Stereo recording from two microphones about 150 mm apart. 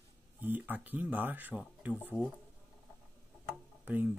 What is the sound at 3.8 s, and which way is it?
Speech, 10° right (ahead or behind).